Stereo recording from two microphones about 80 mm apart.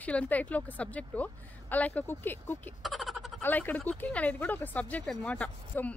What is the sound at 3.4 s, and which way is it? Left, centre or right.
Speech, left.